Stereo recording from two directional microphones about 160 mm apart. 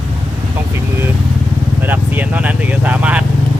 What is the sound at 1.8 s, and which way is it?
Speech, 10° right (ahead or behind).